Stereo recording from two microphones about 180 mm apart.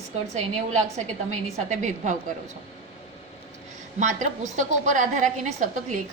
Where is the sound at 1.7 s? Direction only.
45° right (ahead or behind).